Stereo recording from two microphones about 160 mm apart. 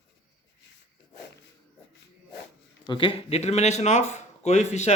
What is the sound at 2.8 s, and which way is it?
Speech, 30° left (ahead or behind).